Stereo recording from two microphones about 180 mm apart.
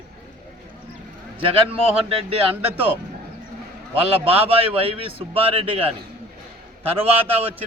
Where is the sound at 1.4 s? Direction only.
30° right (ahead or behind).